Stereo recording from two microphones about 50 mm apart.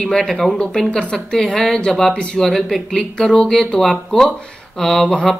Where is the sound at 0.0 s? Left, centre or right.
Centre.